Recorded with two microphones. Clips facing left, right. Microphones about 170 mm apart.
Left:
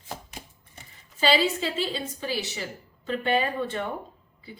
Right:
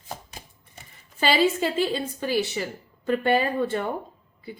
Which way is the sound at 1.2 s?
55° right (ahead or behind).